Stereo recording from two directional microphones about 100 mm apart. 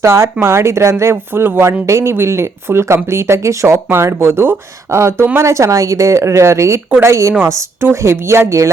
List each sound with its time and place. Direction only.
0.0 s speech: 30° right (ahead or behind)